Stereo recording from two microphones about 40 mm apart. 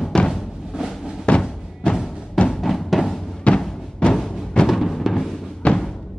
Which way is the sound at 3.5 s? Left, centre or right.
Left.